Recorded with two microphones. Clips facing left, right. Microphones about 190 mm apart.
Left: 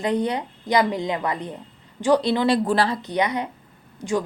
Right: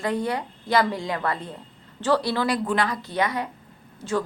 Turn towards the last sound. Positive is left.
turn(degrees=15)  # may be behind; listen again after turning